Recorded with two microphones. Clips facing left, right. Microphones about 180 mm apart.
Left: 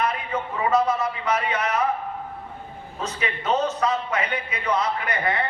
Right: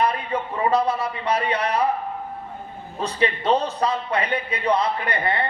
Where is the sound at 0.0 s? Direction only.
35° right (ahead or behind).